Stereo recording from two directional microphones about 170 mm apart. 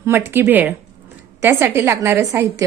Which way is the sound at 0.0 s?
15° right (ahead or behind).